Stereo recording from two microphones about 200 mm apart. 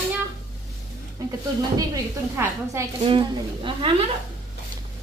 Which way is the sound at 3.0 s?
25° right (ahead or behind).